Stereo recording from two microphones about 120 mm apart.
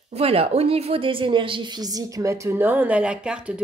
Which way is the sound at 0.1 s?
55° right (ahead or behind).